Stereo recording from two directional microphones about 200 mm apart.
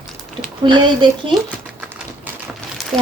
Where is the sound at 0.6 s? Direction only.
25° right (ahead or behind).